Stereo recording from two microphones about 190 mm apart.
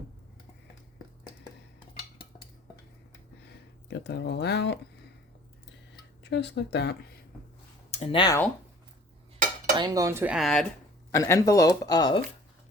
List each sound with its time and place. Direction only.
3.8 s speech: 65° left (ahead or behind)
6.3 s speech: 65° left (ahead or behind)
7.9 s speech: 35° left (ahead or behind)
9.7 s cutlery: 20° right (ahead or behind)
10.3 s speech: centre (ahead or behind)
11.1 s speech: 15° left (ahead or behind)